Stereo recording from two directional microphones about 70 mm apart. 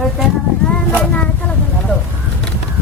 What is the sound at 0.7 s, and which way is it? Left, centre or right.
Speech, centre.